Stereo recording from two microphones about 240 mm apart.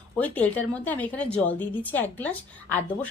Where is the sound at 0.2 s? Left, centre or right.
Centre.